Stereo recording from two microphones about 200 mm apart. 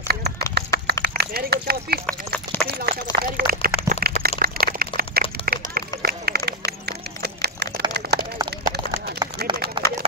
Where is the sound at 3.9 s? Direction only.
45° right (ahead or behind).